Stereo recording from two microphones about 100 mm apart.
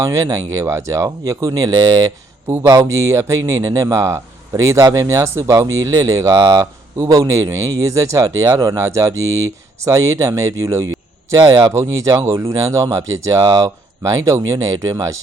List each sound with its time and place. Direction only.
0.0 s speech: 35° right (ahead or behind)